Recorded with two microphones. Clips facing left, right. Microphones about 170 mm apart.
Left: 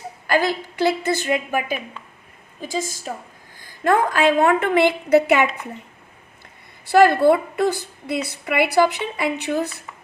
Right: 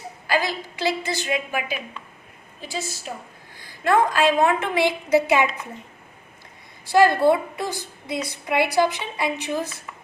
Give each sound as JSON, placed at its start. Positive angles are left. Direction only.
{"t": 0.3, "sound": "a woman's voice", "side_deg": 55}
{"t": 6.8, "sound": "a woman's voice", "side_deg": 60}